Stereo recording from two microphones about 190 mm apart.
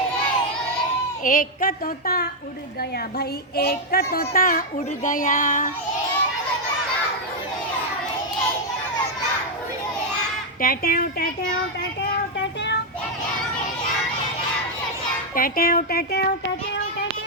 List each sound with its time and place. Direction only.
1.2 s speech: 45° left (ahead or behind)
3.2 s child singing: 55° left (ahead or behind)
4.4 s speech: 50° left (ahead or behind)
10.6 s speech: 50° left (ahead or behind)
15.4 s speech: 50° left (ahead or behind)